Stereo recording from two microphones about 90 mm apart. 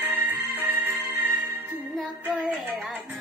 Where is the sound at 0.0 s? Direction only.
25° right (ahead or behind).